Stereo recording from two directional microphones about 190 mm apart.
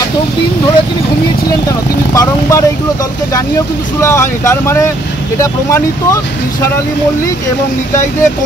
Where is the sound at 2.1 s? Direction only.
15° left (ahead or behind).